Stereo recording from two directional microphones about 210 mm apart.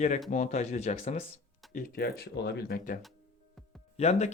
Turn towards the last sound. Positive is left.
turn(degrees=30)  # may be behind; listen again after turning